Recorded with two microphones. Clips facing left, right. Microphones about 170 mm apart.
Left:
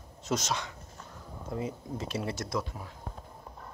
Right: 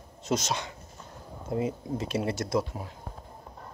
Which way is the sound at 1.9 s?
60° right (ahead or behind).